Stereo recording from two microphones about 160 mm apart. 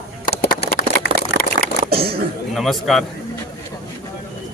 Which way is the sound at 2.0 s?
75° right (ahead or behind).